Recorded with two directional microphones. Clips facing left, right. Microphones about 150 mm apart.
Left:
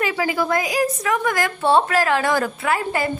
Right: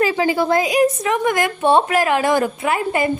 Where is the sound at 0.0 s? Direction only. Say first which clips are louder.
Right 4 dB; 30° right (ahead or behind).